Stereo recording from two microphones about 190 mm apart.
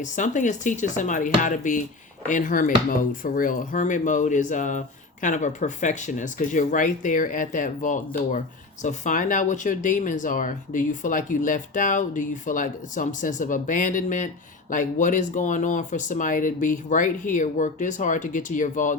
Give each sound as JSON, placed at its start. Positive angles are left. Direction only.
{"t": 0.0, "sound": "speech", "side_deg": 40}